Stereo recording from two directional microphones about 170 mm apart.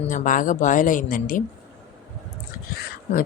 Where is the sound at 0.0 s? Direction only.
50° left (ahead or behind).